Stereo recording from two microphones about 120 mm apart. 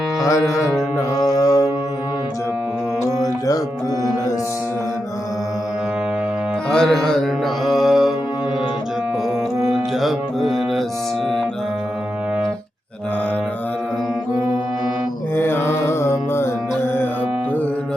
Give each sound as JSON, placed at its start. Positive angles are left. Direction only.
{"t": 0.3, "sound": "music", "side_deg": 25}
{"t": 6.7, "sound": "music", "side_deg": 5}
{"t": 9.6, "sound": "music", "side_deg": -5}
{"t": 15.4, "sound": "music", "side_deg": 20}